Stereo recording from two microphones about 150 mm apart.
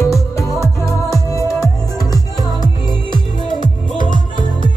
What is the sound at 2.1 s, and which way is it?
Music, 25° left (ahead or behind).